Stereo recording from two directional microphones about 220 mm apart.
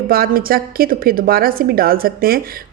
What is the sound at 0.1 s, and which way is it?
A woman's voice, 40° right (ahead or behind).